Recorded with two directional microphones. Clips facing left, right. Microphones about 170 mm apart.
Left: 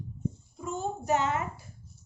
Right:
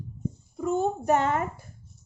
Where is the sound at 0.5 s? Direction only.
55° right (ahead or behind).